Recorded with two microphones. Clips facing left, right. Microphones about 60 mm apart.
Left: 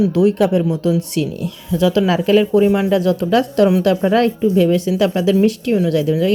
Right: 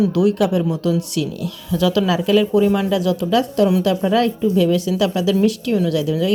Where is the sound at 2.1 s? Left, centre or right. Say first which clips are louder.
Left 2 dB; left.